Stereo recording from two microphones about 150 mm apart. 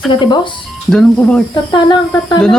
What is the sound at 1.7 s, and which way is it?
Speech, 30° left (ahead or behind).